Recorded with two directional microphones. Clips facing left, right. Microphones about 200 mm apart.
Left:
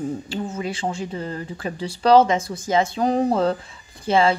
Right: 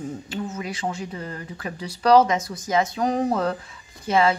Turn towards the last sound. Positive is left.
turn(degrees=30)  # may be behind; listen again after turning